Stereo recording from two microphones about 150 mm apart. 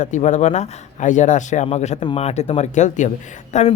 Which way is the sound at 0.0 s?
55° left (ahead or behind).